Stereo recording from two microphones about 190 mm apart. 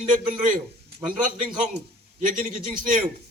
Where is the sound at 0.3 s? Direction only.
45° right (ahead or behind).